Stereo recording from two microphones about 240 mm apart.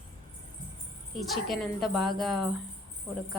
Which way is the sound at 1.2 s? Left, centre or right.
Centre.